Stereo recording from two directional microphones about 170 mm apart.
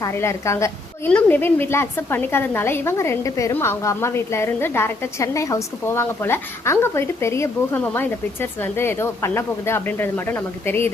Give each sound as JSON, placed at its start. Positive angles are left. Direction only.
{"t": 0.0, "sound": "a woman's voice", "side_deg": 15}